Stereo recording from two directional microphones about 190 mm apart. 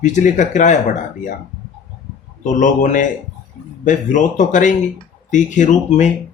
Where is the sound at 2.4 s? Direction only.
40° left (ahead or behind).